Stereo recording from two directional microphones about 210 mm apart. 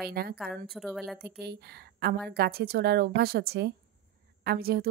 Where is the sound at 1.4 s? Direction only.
50° right (ahead or behind).